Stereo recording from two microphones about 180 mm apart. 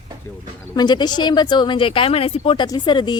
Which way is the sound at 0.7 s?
25° left (ahead or behind).